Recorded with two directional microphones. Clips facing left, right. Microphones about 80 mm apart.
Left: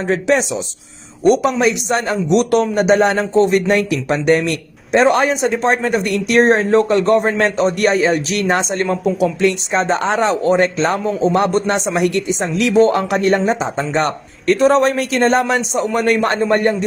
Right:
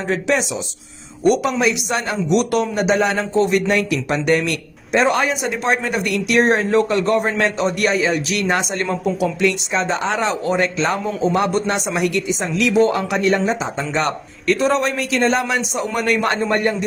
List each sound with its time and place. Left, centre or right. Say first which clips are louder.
0.1 s a man's voice: left 4 dB; left